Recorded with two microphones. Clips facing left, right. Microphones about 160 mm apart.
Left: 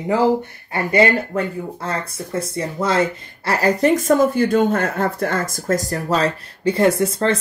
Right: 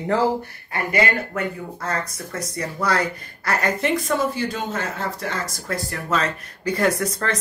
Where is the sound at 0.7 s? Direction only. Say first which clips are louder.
Left 6 dB; 25° left (ahead or behind).